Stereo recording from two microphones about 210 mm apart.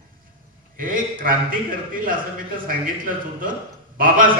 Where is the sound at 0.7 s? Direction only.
40° right (ahead or behind).